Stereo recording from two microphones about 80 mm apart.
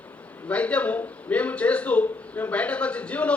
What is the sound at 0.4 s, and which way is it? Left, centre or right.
A man's voice, centre.